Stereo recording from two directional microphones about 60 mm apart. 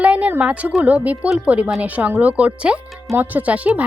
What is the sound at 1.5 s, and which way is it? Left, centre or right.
Speech, right.